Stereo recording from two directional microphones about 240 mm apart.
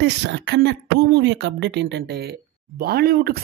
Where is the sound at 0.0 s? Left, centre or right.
Right.